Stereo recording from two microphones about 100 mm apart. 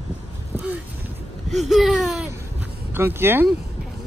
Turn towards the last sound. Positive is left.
turn(degrees=-25)  # may be behind; listen again after turning